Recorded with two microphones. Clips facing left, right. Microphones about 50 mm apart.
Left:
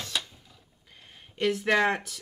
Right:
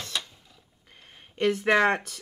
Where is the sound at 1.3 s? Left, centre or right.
Centre.